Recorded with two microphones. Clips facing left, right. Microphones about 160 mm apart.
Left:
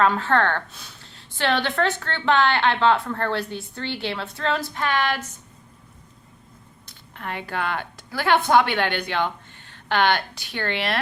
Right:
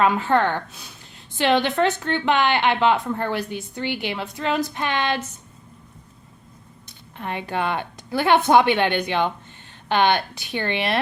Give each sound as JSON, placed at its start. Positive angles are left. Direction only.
{"t": 0.0, "sound": "a woman's voice", "side_deg": -15}
{"t": 6.8, "sound": "a woman's voice", "side_deg": -20}